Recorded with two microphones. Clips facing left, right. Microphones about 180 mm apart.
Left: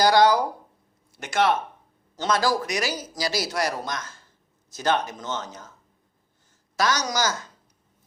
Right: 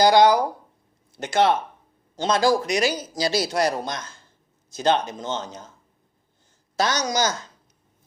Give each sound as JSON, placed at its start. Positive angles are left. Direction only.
{"t": 0.0, "sound": "speech", "side_deg": -20}
{"t": 1.2, "sound": "speech", "side_deg": -30}
{"t": 6.7, "sound": "speech", "side_deg": -25}